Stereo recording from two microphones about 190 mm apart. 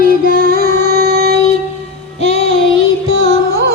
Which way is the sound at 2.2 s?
30° left (ahead or behind).